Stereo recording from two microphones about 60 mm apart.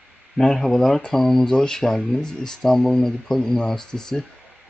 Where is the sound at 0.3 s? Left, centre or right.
Centre.